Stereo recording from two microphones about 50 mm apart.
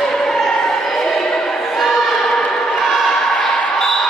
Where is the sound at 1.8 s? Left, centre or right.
Centre.